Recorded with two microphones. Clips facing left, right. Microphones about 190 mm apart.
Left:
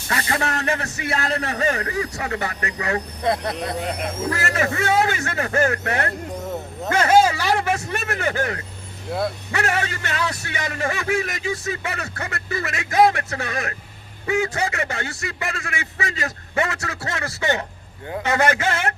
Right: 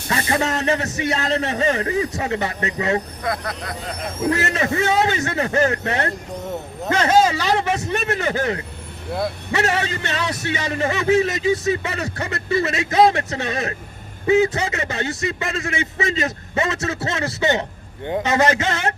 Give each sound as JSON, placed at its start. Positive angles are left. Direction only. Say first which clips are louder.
{"t": 0.1, "sound": "speech", "louder": "right 3 dB", "side_deg": -25}
{"t": 3.2, "sound": "speech", "louder": "left 3 dB", "side_deg": 25}
{"t": 4.3, "sound": "speech", "louder": "right 4 dB", "side_deg": -20}
{"t": 6.9, "sound": "speech", "louder": "even", "side_deg": 10}
{"t": 7.5, "sound": "speech", "louder": "right 2 dB", "side_deg": -25}